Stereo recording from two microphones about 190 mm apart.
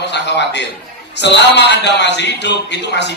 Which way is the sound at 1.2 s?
65° left (ahead or behind).